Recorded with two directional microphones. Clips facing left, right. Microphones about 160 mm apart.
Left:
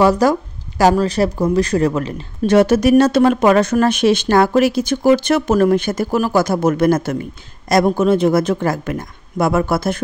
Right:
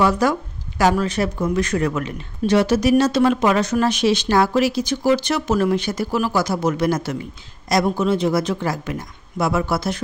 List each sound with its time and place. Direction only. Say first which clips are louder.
0.0 s speech: left 5 dB; 40° left (ahead or behind)
2.4 s speech: left 4 dB; 50° left (ahead or behind)